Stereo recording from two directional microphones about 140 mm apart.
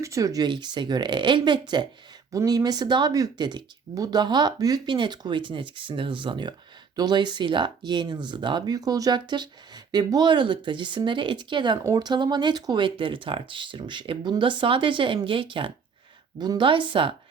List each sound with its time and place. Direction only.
0.0 s speech: 20° right (ahead or behind)